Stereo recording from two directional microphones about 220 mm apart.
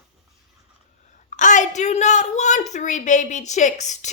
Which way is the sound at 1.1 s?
35° left (ahead or behind).